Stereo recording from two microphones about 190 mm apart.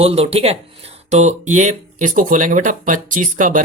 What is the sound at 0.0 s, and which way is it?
Speech, 30° right (ahead or behind).